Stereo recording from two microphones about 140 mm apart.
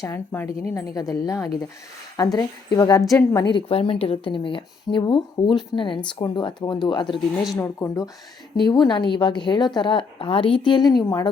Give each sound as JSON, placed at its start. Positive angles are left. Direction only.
{"t": 0.0, "sound": "a woman's voice", "side_deg": 20}
{"t": 3.3, "sound": "a woman's voice", "side_deg": 40}
{"t": 7.5, "sound": "a woman's voice", "side_deg": 20}
{"t": 8.6, "sound": "a woman's voice", "side_deg": 30}